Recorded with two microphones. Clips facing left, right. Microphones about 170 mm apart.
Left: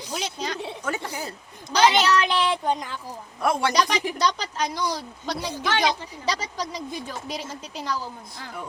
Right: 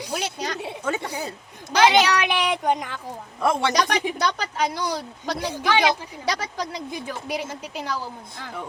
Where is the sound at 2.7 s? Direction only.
25° right (ahead or behind).